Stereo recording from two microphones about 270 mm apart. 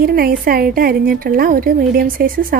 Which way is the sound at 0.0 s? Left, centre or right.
Right.